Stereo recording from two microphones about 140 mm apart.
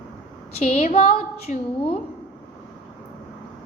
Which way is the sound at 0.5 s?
50° left (ahead or behind).